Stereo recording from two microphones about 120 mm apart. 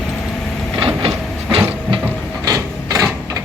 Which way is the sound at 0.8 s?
55° right (ahead or behind).